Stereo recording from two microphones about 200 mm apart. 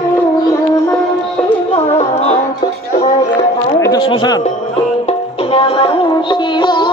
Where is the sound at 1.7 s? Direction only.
30° left (ahead or behind).